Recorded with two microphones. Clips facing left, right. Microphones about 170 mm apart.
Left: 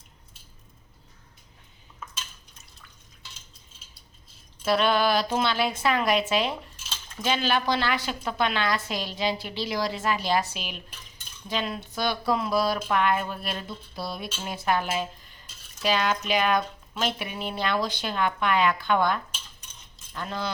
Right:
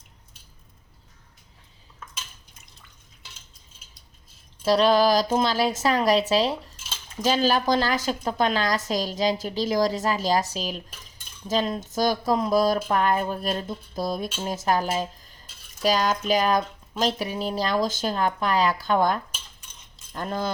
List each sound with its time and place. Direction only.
4.6 s speech: 35° right (ahead or behind)